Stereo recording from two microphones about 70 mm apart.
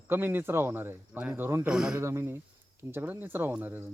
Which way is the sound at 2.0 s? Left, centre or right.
Right.